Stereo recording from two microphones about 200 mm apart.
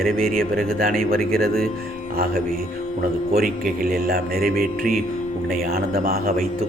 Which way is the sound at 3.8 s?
45° right (ahead or behind).